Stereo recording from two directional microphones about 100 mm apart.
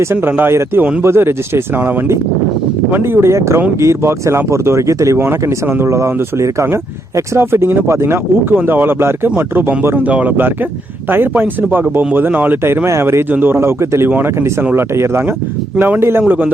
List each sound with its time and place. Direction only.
0.0 s speech: 20° right (ahead or behind)
14.9 s speech: 25° right (ahead or behind)